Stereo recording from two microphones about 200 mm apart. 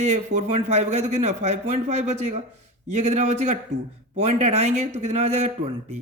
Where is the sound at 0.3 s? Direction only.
35° right (ahead or behind).